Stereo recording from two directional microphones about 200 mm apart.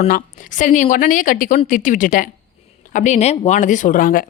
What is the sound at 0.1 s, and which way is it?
Speech, 40° left (ahead or behind).